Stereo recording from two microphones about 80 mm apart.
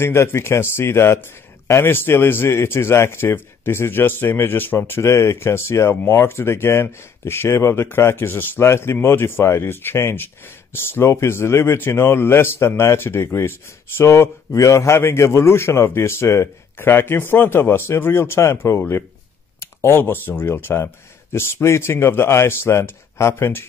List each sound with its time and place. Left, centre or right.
0.0 s speech: left